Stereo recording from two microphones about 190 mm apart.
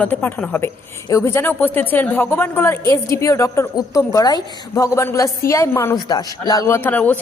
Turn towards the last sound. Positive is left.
turn(degrees=10)  # may be behind; listen again after turning